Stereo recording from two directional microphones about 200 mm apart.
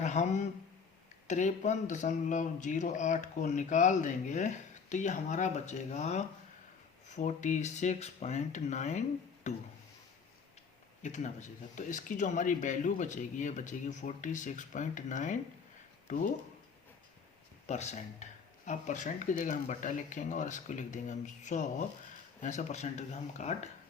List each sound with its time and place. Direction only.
0.0 s speech: 35° left (ahead or behind)
11.0 s speech: 35° left (ahead or behind)
17.7 s speech: 35° left (ahead or behind)